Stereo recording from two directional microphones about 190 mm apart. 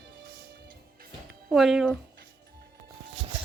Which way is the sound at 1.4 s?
Centre (ahead or behind).